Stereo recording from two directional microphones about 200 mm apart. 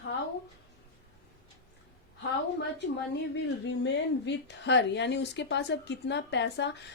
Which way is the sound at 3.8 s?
60° left (ahead or behind).